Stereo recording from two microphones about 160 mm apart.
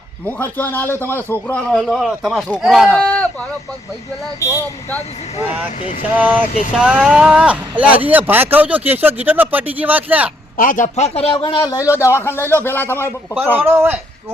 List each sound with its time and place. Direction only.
0.3 s a man's voice: 10° left (ahead or behind)
4.4 s a man's voice: 20° left (ahead or behind)
6.1 s speech: 10° right (ahead or behind)
10.6 s a man's voice: 55° left (ahead or behind); by 13.1 s 15° left (ahead or behind)
13.3 s speech: 10° right (ahead or behind)